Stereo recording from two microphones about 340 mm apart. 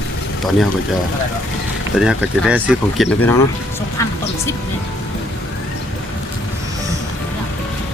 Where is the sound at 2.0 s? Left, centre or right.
Centre.